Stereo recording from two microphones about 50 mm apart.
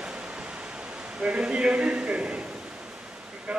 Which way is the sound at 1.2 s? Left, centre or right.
Right.